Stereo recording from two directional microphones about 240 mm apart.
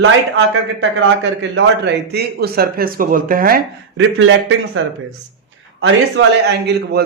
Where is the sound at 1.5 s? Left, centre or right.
Right.